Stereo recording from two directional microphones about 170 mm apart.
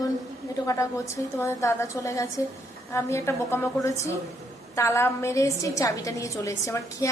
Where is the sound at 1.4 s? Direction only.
15° left (ahead or behind).